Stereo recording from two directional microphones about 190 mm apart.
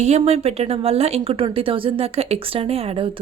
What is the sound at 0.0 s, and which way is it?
A woman's voice, 35° right (ahead or behind).